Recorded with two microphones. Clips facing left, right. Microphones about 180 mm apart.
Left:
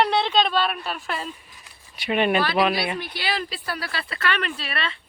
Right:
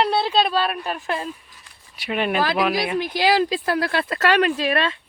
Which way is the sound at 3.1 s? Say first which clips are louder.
Right 13 dB; 90° right.